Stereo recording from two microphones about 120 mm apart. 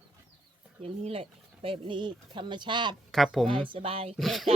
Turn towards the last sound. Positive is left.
turn(degrees=0)  # may be behind; listen again after turning